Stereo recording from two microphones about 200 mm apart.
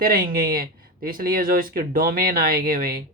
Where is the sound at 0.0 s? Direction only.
45° right (ahead or behind).